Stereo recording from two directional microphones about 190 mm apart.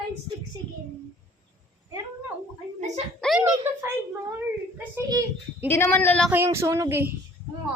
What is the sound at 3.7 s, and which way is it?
Child singing, 10° right (ahead or behind).